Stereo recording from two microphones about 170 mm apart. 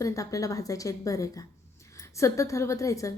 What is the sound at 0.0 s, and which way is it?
A woman's voice, 20° left (ahead or behind).